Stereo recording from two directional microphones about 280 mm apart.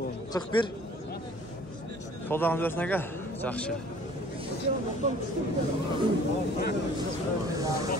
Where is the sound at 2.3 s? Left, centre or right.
Centre.